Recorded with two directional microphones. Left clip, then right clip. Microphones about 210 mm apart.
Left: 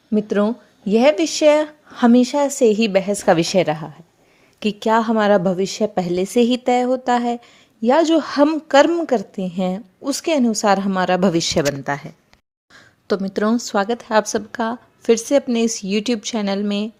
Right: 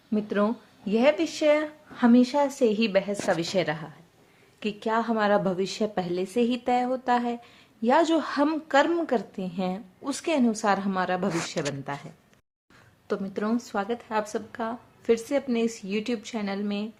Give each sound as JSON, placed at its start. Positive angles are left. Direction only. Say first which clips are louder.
{"t": 0.1, "sound": "a woman's voice", "louder": "left 7 dB", "side_deg": 30}
{"t": 4.6, "sound": "a woman's voice", "louder": "left 9 dB", "side_deg": 45}